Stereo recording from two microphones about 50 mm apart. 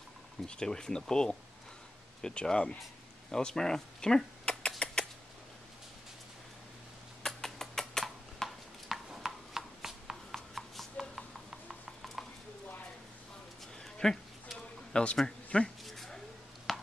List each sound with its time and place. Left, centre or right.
0.5 s speech: centre
3.3 s rodents: centre
7.2 s a sound: centre
10.3 s horse: centre
11.1 s clip-clop: centre
12.2 s a sound: centre
14.0 s speech: centre
14.9 s a man's voice: centre
15.8 s a sound: centre